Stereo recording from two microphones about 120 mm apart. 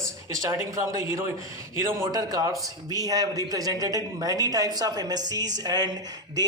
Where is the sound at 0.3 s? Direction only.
25° right (ahead or behind).